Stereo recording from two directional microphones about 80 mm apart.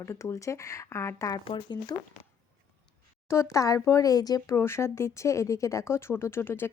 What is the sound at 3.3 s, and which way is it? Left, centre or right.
A woman's voice, left.